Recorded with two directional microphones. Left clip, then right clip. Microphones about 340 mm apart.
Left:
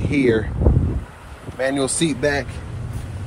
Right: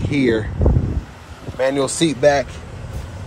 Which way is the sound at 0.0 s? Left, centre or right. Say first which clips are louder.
Even; centre.